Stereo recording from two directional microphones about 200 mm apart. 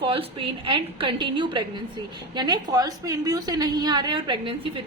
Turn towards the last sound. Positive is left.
turn(degrees=-25)  # may be behind; listen again after turning